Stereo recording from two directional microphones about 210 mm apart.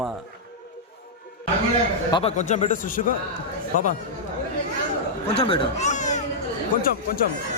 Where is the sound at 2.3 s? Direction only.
35° left (ahead or behind).